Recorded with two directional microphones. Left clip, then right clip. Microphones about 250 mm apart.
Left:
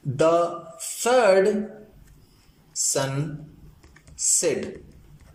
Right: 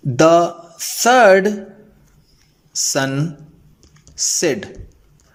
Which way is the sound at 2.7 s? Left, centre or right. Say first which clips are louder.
Right 7 dB; right.